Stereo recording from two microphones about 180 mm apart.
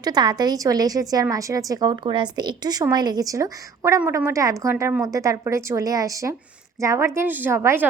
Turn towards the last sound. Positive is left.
turn(degrees=-15)  # may be behind; listen again after turning